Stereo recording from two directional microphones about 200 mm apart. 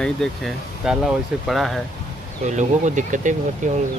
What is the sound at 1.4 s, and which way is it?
Speech, centre (ahead or behind).